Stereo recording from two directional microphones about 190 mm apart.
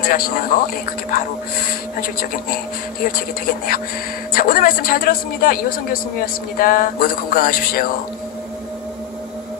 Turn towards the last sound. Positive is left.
turn(degrees=50)  # may be behind; listen again after turning